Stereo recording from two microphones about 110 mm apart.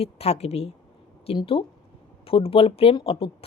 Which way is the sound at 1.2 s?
55° left (ahead or behind).